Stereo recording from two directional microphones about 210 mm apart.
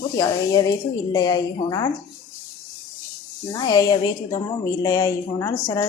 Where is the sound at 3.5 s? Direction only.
20° left (ahead or behind).